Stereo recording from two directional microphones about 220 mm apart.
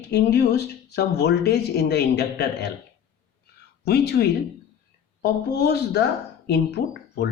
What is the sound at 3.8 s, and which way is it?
Speech, 50° left (ahead or behind).